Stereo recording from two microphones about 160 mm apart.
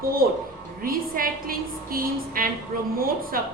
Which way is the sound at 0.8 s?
65° right (ahead or behind).